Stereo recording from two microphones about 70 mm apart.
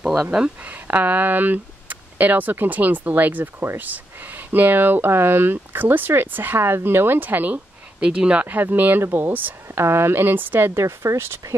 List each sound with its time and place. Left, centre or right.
0.0 s speech: centre
0.7 s speech: right
8.0 s speech: centre; by 11.3 s right